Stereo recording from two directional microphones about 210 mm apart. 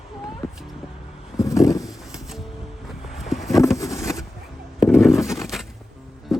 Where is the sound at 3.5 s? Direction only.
15° left (ahead or behind).